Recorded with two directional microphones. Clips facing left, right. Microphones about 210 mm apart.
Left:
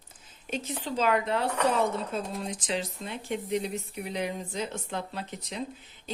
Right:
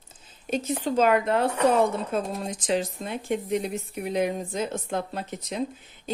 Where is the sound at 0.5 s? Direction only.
45° right (ahead or behind).